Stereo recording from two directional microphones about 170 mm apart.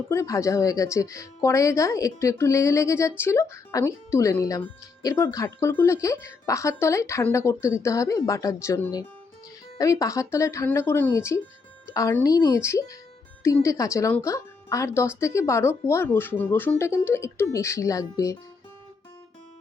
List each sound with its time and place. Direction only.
0.1 s a woman's voice: 15° left (ahead or behind)